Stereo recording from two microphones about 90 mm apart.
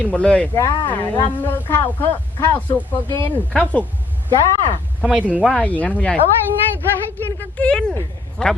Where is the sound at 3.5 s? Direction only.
10° left (ahead or behind).